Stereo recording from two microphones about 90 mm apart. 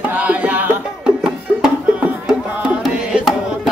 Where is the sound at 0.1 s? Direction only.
15° right (ahead or behind).